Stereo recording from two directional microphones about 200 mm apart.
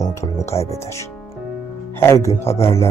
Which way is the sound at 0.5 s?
30° left (ahead or behind).